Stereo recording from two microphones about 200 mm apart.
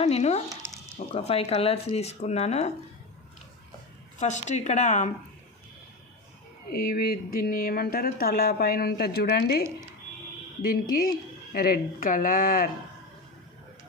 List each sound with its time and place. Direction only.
0.0 s speech: 30° left (ahead or behind)
4.2 s speech: 35° left (ahead or behind)
6.7 s speech: 50° left (ahead or behind)